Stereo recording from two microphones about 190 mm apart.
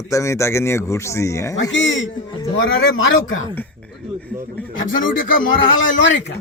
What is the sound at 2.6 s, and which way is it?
Speech, 90° left.